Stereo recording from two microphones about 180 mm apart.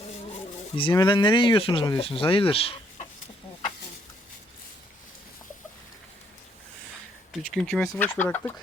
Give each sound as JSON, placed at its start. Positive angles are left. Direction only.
{"t": 0.8, "sound": "speech", "side_deg": 25}
{"t": 7.5, "sound": "speech", "side_deg": 0}